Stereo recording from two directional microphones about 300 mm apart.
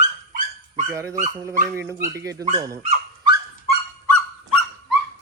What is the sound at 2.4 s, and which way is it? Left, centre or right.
Dog, centre.